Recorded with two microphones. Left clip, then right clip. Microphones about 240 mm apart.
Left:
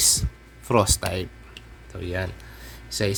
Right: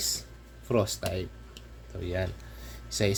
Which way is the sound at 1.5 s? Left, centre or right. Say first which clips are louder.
Left 4 dB; centre.